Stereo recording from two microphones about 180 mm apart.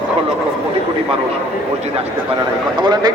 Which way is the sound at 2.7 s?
25° right (ahead or behind).